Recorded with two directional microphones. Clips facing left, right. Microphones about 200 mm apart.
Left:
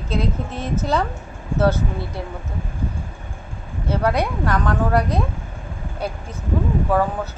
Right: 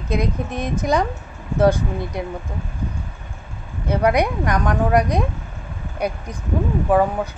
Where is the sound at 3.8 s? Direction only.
15° right (ahead or behind).